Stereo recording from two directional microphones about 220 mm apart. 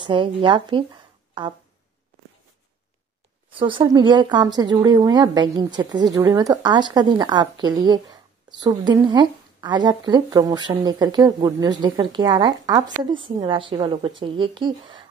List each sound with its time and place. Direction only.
0.0 s speech: 20° right (ahead or behind)
3.5 s speech: 20° right (ahead or behind)